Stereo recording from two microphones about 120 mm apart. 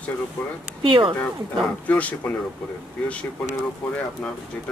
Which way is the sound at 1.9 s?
15° left (ahead or behind).